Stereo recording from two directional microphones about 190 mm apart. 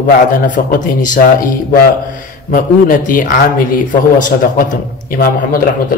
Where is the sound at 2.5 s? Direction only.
45° left (ahead or behind).